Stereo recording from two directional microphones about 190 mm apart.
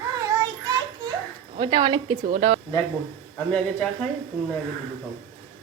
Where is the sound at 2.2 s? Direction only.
40° right (ahead or behind).